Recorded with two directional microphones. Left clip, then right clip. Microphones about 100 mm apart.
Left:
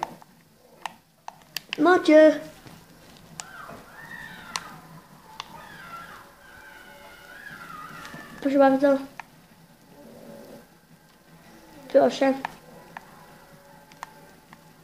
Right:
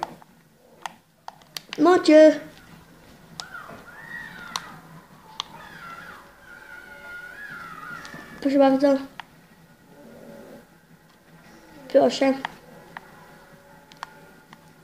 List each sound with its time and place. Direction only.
1.8 s speech: 20° right (ahead or behind)
8.4 s speech: 25° right (ahead or behind)
11.9 s speech: 25° right (ahead or behind)